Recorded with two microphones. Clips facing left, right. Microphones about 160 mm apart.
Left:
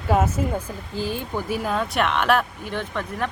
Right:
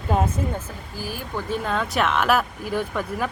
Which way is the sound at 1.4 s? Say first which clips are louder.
Right 1 dB; 5° left (ahead or behind).